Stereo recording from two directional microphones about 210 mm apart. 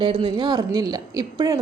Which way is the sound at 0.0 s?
25° right (ahead or behind).